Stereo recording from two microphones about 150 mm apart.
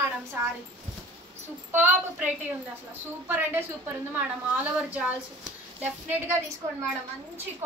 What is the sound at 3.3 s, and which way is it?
A woman's voice, 15° right (ahead or behind).